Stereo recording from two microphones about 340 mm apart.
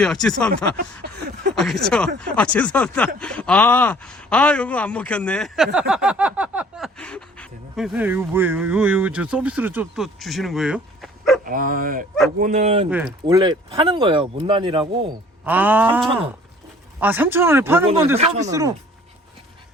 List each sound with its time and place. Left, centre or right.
0.0 s speech: centre
1.5 s speech: centre
11.4 s speech: right; by 18.2 s centre
18.2 s speech: centre